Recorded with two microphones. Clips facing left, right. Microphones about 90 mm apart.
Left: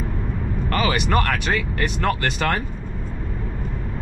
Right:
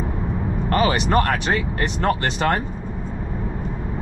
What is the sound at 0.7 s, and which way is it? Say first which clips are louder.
Speech: right 2 dB; 30° right (ahead or behind).